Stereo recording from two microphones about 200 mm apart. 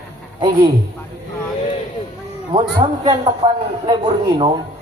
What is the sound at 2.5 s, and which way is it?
A man's voice, 25° right (ahead or behind).